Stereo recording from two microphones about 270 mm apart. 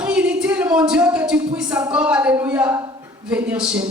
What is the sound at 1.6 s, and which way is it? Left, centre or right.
A woman's voice, centre.